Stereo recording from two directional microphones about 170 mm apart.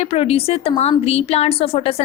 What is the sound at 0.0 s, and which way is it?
A woman's voice, 35° left (ahead or behind).